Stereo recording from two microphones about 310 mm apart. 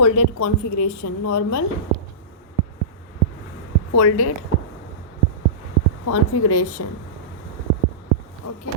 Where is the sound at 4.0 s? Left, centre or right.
Left.